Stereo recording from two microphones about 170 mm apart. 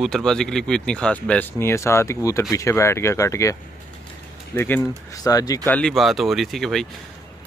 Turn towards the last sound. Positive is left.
turn(degrees=0)  # may be behind; listen again after turning